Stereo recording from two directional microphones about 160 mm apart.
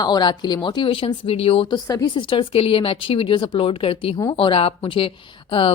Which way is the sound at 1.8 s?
25° left (ahead or behind).